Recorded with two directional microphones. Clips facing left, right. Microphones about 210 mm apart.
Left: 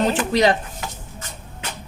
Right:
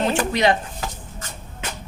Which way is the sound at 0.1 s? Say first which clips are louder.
Left 1 dB; 35° left (ahead or behind).